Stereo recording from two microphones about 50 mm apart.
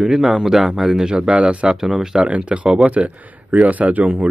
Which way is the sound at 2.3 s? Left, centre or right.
Right.